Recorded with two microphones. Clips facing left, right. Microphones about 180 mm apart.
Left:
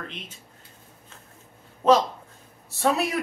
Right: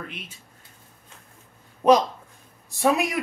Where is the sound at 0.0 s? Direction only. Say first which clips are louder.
Even; 10° right (ahead or behind).